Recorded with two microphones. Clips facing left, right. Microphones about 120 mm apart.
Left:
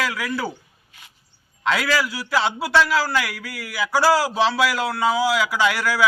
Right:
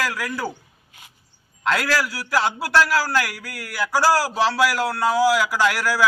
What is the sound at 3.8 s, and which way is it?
Speech, 10° right (ahead or behind).